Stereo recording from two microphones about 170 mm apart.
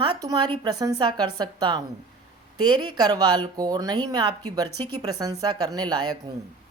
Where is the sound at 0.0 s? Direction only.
25° right (ahead or behind).